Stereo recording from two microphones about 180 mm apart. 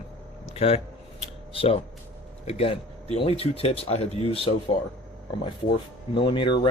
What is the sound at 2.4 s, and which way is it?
Speech, 35° left (ahead or behind).